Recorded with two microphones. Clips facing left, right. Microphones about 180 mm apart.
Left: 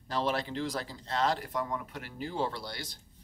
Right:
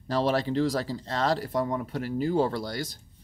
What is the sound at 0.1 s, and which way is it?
Speech, 35° right (ahead or behind).